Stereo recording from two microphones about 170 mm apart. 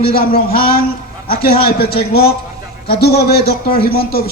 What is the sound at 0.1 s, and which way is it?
A man's voice, 60° left (ahead or behind).